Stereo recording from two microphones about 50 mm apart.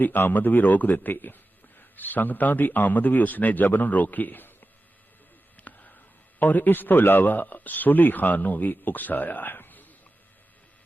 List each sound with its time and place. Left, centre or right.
0.0 s speech: left
5.5 s a sound: left
6.4 s speech: left